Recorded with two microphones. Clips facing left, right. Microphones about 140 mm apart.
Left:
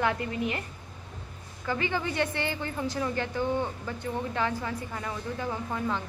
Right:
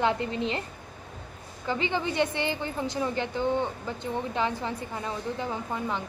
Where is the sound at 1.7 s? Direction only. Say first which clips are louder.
Right 1 dB; 20° right (ahead or behind).